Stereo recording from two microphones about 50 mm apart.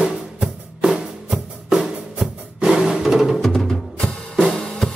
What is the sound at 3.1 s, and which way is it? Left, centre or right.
Music, centre.